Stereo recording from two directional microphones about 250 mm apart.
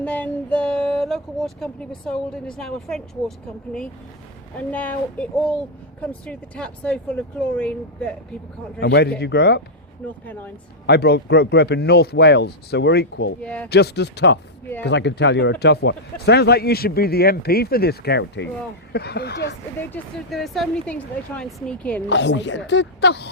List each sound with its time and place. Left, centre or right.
0.0 s speech: centre
8.8 s speech: left
10.0 s speech: centre
10.8 s speech: left
13.4 s speech: centre
13.7 s speech: left
19.9 s speech: centre
22.1 s speech: left